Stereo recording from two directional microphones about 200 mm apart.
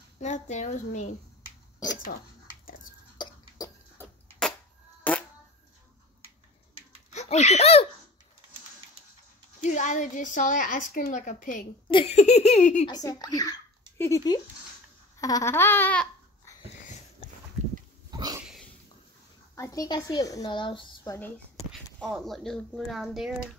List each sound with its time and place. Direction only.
0.2 s a woman's voice: 35° left (ahead or behind)
1.8 s speech: 20° left (ahead or behind)
3.2 s cough: 20° left (ahead or behind)
5.1 s fart: 5° left (ahead or behind)
7.1 s speech: 35° left (ahead or behind)
9.6 s a woman's voice: 40° left (ahead or behind)
11.9 s a woman's voice: 30° left (ahead or behind)
12.8 s a child's voice: 20° left (ahead or behind)
15.1 s babbling: 15° left (ahead or behind)
18.1 s a sound: 20° right (ahead or behind)
19.5 s speech: 15° left (ahead or behind)
22.0 s speech: centre (ahead or behind)